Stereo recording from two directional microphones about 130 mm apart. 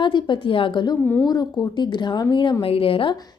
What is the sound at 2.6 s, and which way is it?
Speech, 45° left (ahead or behind).